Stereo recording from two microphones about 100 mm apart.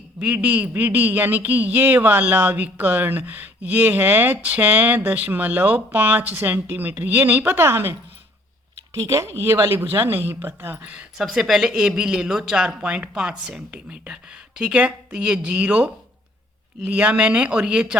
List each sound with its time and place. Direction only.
0.2 s speech: 15° right (ahead or behind)
9.0 s speech: 30° right (ahead or behind); by 11.0 s 15° right (ahead or behind)
11.2 s speech: centre (ahead or behind)